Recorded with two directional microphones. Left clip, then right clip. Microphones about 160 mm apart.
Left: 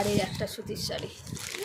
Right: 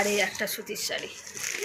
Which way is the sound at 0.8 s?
25° left (ahead or behind).